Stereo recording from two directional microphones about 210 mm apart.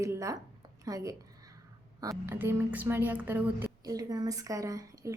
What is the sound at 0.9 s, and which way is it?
A woman's voice, 15° right (ahead or behind).